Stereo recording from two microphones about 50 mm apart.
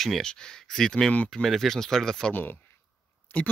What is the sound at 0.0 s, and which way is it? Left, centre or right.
Speech, centre.